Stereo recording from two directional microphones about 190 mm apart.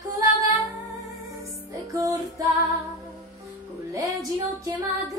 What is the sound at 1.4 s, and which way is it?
Music, 15° right (ahead or behind).